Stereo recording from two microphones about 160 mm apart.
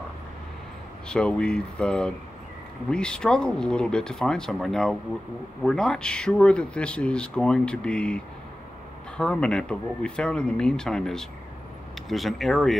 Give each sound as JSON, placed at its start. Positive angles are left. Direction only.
{"t": 1.0, "sound": "speech", "side_deg": 5}